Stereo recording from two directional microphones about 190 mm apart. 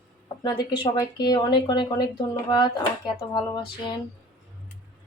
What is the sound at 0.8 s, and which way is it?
Speech, 20° left (ahead or behind).